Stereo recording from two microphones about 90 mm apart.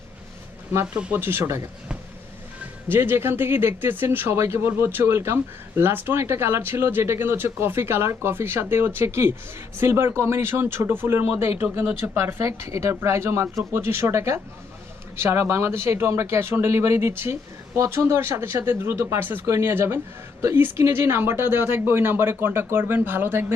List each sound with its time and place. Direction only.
0.9 s speech: 15° right (ahead or behind)
1.2 s speech: 25° right (ahead or behind)
2.9 s speech: 25° right (ahead or behind)